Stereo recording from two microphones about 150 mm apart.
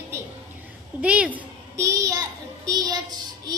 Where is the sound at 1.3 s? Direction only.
20° right (ahead or behind).